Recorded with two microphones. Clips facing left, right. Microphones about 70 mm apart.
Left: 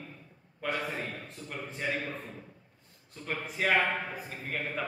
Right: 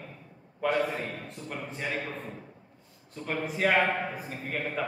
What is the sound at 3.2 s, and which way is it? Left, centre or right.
Speech, centre.